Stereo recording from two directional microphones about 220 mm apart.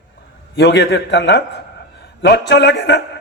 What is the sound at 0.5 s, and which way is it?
A man's voice, 50° left (ahead or behind).